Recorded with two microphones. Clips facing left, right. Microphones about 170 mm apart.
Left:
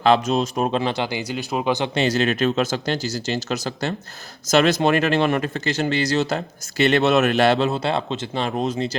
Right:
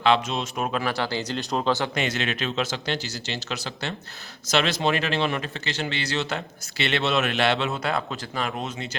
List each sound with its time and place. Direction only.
0.0 s speech: 40° left (ahead or behind); by 1.9 s 15° left (ahead or behind)
2.0 s speech: 40° left (ahead or behind)